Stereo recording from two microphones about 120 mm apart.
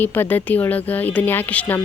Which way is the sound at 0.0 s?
15° left (ahead or behind).